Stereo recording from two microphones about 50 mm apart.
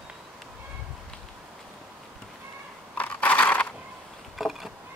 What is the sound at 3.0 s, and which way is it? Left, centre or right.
Scissors, left.